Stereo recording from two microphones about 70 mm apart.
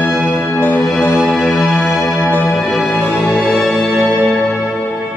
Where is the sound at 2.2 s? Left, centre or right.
Left.